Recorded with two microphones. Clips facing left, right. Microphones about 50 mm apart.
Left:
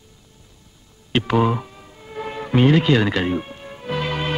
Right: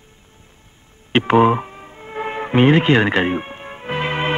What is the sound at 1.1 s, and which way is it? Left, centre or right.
Music, right.